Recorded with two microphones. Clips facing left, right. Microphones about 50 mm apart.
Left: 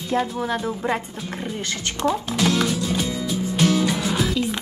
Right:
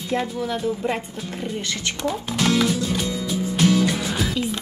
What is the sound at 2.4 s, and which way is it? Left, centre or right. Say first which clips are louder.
Music: right 3 dB; centre.